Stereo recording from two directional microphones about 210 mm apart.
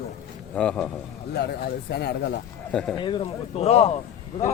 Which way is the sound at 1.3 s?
50° left (ahead or behind).